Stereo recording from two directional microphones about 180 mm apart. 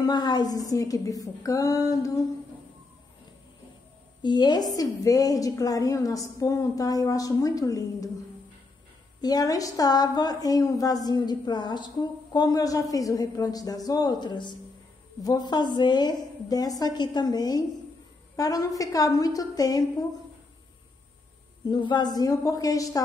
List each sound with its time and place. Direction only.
0.0 s a woman's voice: 25° left (ahead or behind)
4.2 s a woman's voice: 25° left (ahead or behind)
9.2 s a woman's voice: 20° left (ahead or behind)
21.6 s a woman's voice: 25° left (ahead or behind)